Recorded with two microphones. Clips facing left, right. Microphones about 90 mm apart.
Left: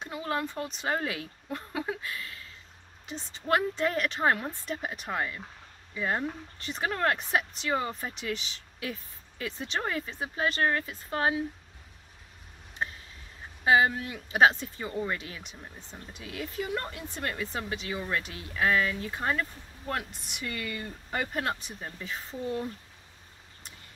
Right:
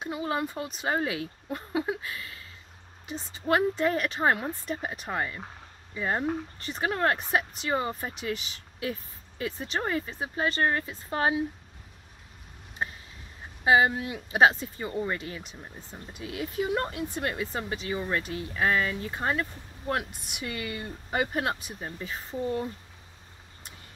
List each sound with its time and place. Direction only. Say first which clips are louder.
0.0 s speech: right 2 dB; 10° right (ahead or behind)
13.7 s speech: right 1 dB; 10° right (ahead or behind)
22.0 s speech: right 3 dB; centre (ahead or behind)